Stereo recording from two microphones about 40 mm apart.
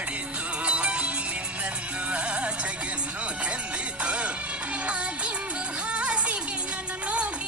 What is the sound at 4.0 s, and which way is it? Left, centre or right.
Music, right.